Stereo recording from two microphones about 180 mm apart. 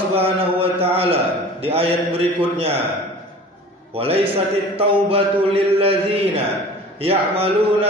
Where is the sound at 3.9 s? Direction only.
30° right (ahead or behind).